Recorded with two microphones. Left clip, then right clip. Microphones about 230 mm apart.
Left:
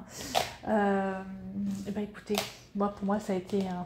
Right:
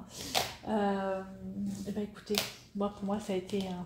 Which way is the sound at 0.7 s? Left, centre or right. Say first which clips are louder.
Left 6 dB; left.